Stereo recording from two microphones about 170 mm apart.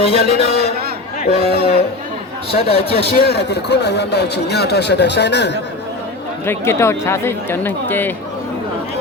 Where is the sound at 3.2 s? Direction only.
75° left (ahead or behind).